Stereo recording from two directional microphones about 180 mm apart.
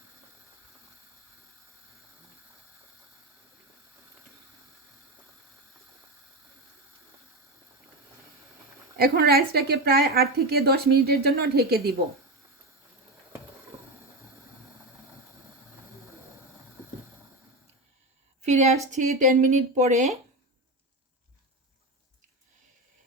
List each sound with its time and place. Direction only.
9.0 s a woman's voice: 60° right (ahead or behind)
18.4 s a woman's voice: 40° right (ahead or behind)